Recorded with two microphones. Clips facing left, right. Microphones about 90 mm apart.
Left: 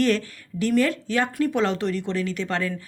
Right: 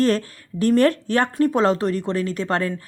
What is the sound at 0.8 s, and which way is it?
Speech, 55° right (ahead or behind).